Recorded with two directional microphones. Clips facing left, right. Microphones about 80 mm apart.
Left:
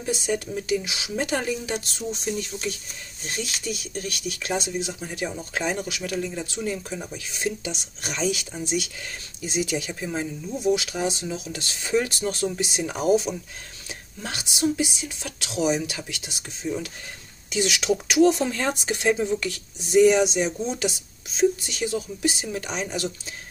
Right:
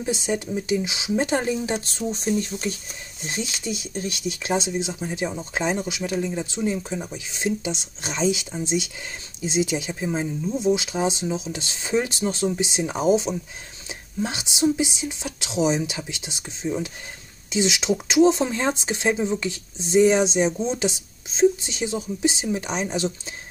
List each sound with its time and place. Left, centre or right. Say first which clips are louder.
0.0 s speech: right 1 dB; right
3.3 s speech: right 2 dB; right